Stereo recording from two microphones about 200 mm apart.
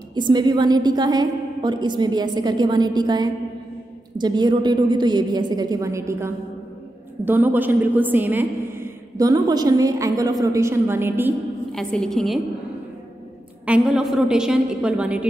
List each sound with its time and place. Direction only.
0.1 s a woman's voice: 20° right (ahead or behind)
11.7 s a woman's voice: centre (ahead or behind)
13.7 s a woman's voice: 5° right (ahead or behind)